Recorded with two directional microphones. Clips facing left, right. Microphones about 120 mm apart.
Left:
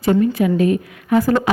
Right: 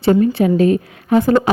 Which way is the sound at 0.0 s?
30° right (ahead or behind).